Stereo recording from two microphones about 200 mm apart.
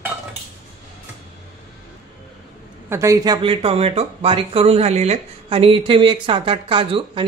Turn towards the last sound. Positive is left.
turn(degrees=-25)  # may be behind; listen again after turning